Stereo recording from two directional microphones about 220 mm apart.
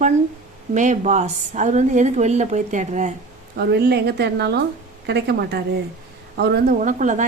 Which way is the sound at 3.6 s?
50° right (ahead or behind).